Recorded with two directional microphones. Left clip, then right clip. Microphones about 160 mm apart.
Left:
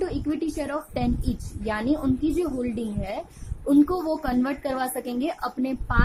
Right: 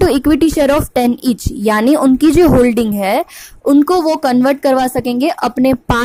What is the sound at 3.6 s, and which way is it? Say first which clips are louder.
A woman's voice: right 11 dB; 50° right (ahead or behind).